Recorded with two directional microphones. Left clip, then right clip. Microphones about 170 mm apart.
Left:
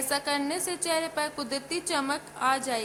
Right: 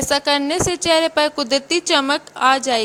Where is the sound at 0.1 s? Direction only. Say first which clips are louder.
Right 11 dB; 45° right (ahead or behind).